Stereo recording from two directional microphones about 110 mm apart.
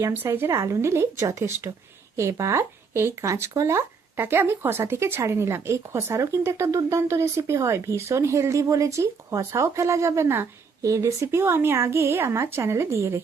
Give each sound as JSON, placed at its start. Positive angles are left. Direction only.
{"t": 0.0, "sound": "speech", "side_deg": -25}